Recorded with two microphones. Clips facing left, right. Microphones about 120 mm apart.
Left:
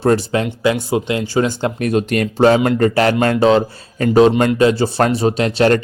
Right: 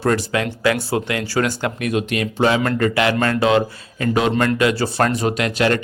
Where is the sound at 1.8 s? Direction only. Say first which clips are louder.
Left 5 dB; 40° left (ahead or behind).